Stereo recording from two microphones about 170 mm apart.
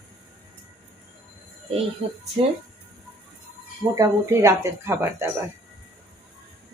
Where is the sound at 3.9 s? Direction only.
20° right (ahead or behind).